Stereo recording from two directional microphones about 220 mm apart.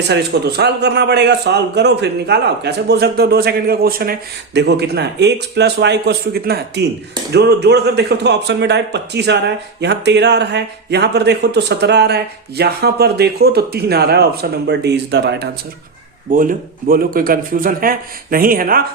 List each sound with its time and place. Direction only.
0.1 s a man's voice: 50° right (ahead or behind)
16.3 s speech: 40° right (ahead or behind)